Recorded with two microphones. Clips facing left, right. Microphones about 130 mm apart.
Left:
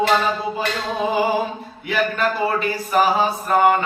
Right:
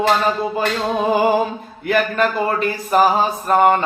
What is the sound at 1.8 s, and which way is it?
Mantra, 50° right (ahead or behind).